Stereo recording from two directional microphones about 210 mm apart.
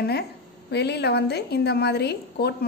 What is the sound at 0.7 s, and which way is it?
A woman's voice, 55° left (ahead or behind).